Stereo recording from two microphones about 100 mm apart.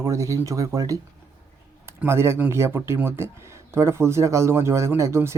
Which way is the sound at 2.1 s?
25° right (ahead or behind).